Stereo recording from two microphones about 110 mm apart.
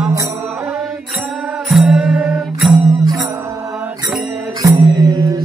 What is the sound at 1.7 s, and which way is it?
Music, centre (ahead or behind).